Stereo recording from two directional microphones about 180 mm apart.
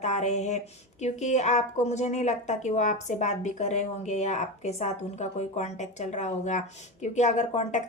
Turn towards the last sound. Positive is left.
turn(degrees=40)  # may be behind; listen again after turning